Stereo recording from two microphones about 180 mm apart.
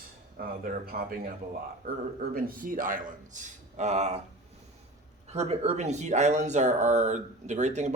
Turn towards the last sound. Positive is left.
turn(degrees=-40)  # may be behind; listen again after turning